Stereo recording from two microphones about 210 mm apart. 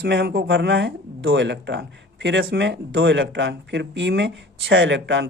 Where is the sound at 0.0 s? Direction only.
55° right (ahead or behind).